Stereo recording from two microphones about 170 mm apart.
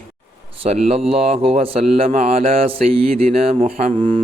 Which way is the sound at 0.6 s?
35° right (ahead or behind).